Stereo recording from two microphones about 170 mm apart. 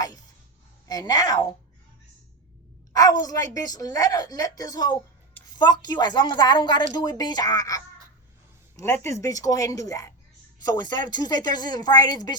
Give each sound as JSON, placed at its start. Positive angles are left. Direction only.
{"t": 0.9, "sound": "a woman's voice", "side_deg": 25}
{"t": 2.9, "sound": "a woman's voice", "side_deg": 20}
{"t": 8.7, "sound": "a sound", "side_deg": 15}
{"t": 9.0, "sound": "a woman's voice", "side_deg": 20}